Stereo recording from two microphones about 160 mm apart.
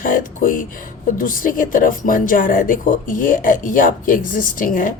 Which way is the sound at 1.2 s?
60° left (ahead or behind).